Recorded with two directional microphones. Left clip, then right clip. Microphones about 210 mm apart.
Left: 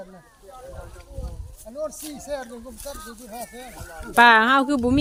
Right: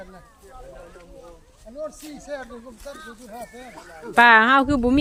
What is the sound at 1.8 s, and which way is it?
Speech, 45° left (ahead or behind).